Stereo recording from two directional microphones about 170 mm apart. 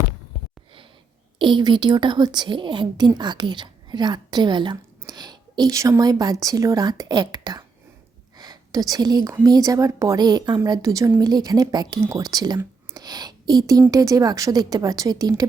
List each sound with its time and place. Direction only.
1.4 s a woman's voice: 30° right (ahead or behind)
8.4 s a sound: 20° right (ahead or behind)
9.3 s a woman's voice: 20° right (ahead or behind)